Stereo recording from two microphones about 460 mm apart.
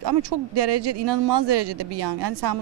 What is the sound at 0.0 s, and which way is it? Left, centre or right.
Speech, right.